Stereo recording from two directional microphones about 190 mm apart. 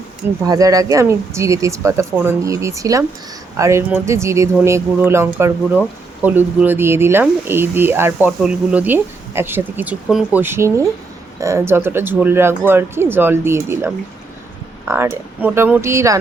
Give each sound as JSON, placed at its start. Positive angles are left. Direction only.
{"t": 0.4, "sound": "speech", "side_deg": -20}